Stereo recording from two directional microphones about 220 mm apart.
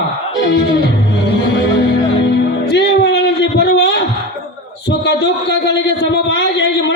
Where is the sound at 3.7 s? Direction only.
50° left (ahead or behind).